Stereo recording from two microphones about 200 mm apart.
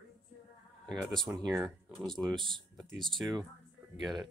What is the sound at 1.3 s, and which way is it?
Speech, 15° right (ahead or behind).